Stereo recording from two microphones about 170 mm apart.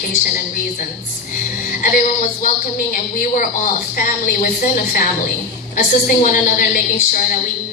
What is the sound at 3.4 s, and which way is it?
A woman's voice, 55° left (ahead or behind).